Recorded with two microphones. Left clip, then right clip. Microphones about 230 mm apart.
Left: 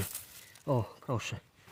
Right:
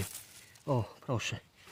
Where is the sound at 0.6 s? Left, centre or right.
Centre.